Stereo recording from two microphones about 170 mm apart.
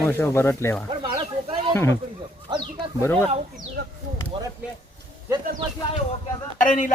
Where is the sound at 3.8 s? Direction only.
80° right.